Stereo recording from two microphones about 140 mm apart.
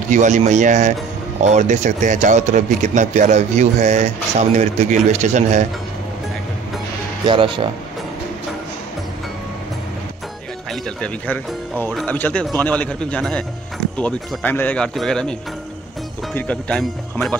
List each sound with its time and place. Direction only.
0.1 s speech: 60° right (ahead or behind)
7.2 s speech: 35° right (ahead or behind)
10.7 s a man's voice: 5° left (ahead or behind)
16.3 s a man's voice: 10° left (ahead or behind)